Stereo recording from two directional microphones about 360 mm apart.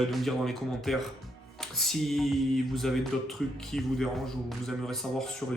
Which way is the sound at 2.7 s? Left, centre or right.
Centre.